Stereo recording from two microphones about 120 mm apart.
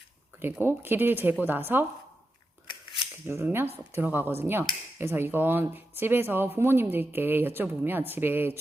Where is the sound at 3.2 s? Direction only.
20° right (ahead or behind).